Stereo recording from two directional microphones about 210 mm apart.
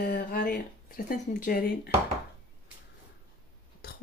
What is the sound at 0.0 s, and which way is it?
Speech, 45° left (ahead or behind).